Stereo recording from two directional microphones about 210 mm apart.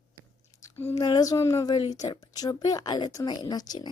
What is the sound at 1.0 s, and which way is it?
Speech, 20° left (ahead or behind).